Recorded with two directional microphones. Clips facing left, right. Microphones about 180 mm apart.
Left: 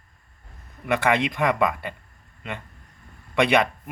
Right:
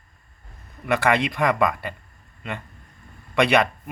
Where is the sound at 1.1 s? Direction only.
15° left (ahead or behind).